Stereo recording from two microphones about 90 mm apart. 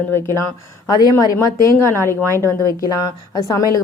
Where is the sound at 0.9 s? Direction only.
45° left (ahead or behind).